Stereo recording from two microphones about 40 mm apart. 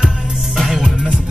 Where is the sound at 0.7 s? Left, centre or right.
Centre.